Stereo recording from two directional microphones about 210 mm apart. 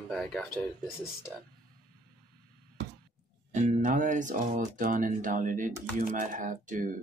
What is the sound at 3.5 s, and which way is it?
Speech, 35° right (ahead or behind).